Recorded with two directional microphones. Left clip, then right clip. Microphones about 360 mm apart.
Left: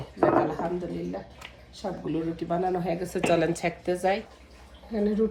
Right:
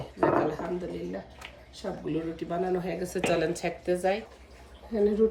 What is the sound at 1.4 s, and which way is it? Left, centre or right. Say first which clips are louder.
Speech: left 3 dB; centre.